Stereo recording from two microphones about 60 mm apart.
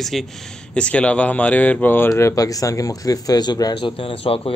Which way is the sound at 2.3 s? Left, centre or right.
Left.